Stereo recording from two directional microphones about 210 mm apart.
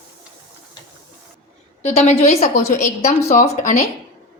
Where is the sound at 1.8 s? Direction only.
35° left (ahead or behind).